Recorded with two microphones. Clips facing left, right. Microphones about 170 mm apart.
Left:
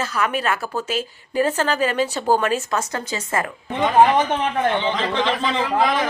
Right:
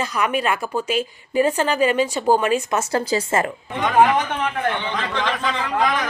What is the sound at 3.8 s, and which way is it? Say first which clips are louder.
Speech: left 1 dB; 20° left (ahead or behind).